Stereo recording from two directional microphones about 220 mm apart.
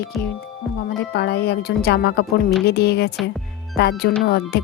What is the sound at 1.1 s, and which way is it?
A woman's voice, 45° left (ahead or behind).